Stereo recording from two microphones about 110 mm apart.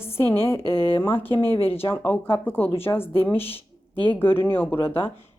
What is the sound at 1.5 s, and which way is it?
Speech, 60° left (ahead or behind).